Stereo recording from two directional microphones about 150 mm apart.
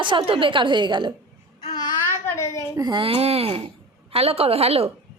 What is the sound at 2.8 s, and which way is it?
A woman's voice, 30° right (ahead or behind).